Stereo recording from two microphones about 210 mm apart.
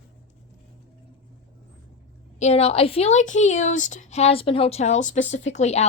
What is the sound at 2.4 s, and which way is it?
A woman's voice, 30° left (ahead or behind).